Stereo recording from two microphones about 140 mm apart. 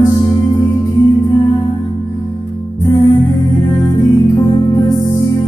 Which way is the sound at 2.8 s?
30° left (ahead or behind).